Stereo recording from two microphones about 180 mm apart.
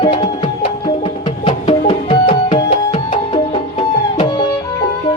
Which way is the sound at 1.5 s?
30° left (ahead or behind).